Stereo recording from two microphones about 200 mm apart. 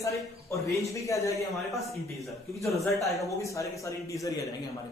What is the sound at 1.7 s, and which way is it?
Speech, centre (ahead or behind).